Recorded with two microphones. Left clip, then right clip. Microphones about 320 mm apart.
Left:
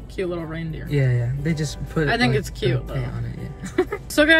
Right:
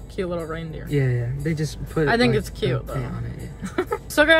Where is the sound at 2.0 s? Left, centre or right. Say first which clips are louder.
Right 1 dB; centre.